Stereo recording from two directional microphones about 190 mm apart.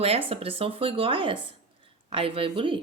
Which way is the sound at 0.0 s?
30° right (ahead or behind).